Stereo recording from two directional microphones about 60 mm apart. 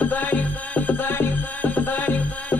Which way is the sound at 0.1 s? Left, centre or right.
Left.